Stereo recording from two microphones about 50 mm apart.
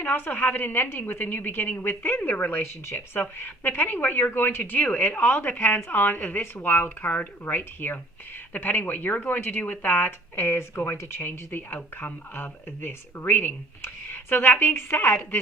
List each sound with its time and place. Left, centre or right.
0.0 s a woman's voice: left